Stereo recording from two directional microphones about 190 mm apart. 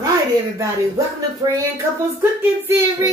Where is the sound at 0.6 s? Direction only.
15° right (ahead or behind).